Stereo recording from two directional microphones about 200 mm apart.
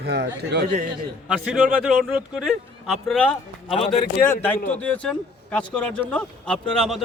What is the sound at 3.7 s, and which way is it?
Speech, 30° left (ahead or behind).